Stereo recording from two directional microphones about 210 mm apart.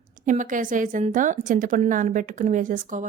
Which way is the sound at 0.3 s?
40° right (ahead or behind).